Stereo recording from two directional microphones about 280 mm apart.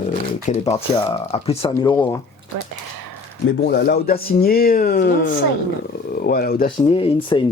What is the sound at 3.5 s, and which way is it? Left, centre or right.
Speech, left.